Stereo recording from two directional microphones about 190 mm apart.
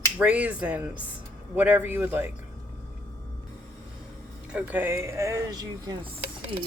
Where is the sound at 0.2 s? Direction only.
5° right (ahead or behind).